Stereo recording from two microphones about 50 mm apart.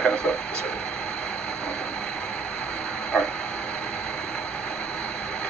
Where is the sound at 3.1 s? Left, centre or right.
Centre.